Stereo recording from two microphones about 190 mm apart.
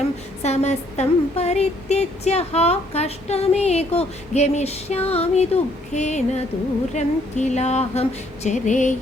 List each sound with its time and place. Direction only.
0.4 s speech: 35° left (ahead or behind)